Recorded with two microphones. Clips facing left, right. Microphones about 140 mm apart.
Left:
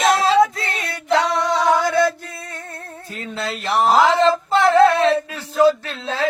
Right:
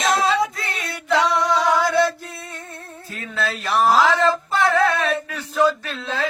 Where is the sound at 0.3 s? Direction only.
25° left (ahead or behind).